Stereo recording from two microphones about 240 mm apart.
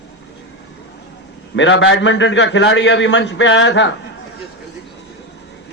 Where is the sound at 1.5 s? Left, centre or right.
Left.